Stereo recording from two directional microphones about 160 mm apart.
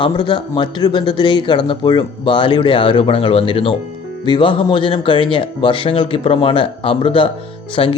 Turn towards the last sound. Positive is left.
turn(degrees=35)  # may be behind; listen again after turning